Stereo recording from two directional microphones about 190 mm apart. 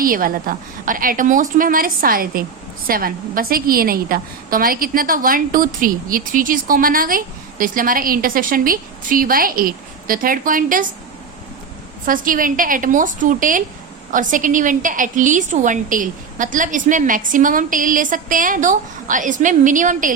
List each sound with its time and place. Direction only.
0.0 s a woman's voice: 50° right (ahead or behind)
12.0 s a woman's voice: 45° right (ahead or behind)